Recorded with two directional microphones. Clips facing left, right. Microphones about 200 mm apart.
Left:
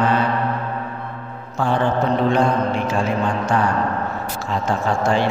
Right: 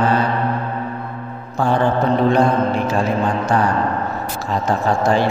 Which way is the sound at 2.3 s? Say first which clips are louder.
Right 2 dB; 40° right (ahead or behind).